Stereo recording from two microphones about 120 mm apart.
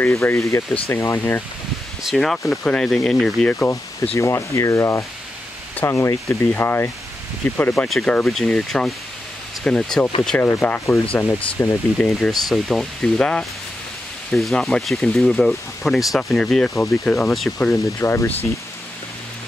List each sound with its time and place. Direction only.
0.0 s speech: 20° left (ahead or behind)
2.0 s speech: 5° left (ahead or behind)
4.2 s speech: 25° left (ahead or behind)
7.7 s speech: 5° left (ahead or behind)
11.6 s speech: 25° left (ahead or behind)
12.1 s speech: centre (ahead or behind)
17.9 s speech: 25° left (ahead or behind)